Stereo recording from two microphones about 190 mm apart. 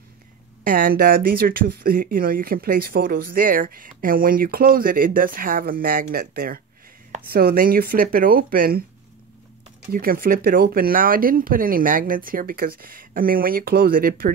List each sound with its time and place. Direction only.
0.7 s speech: 50° right (ahead or behind)
9.9 s speech: 50° right (ahead or behind)